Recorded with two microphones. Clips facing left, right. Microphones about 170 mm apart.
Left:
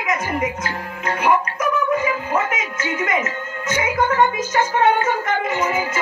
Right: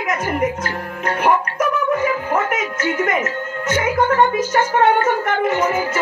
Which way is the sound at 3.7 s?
45° right (ahead or behind).